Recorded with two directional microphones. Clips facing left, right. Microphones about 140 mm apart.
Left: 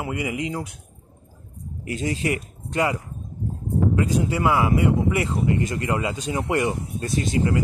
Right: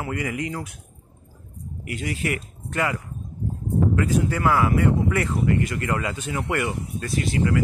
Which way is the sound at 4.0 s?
15° left (ahead or behind).